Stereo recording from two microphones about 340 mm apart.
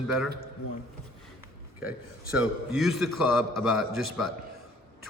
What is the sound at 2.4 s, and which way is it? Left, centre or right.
A man's voice, centre.